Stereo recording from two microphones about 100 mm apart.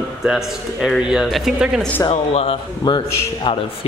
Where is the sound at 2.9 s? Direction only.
50° left (ahead or behind).